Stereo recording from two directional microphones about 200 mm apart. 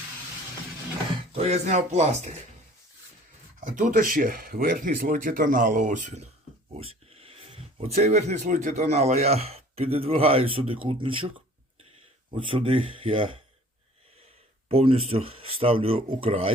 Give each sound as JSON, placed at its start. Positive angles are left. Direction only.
{"t": 1.3, "sound": "speech", "side_deg": -30}
{"t": 3.6, "sound": "speech", "side_deg": -40}
{"t": 12.5, "sound": "speech", "side_deg": -25}
{"t": 14.7, "sound": "speech", "side_deg": -30}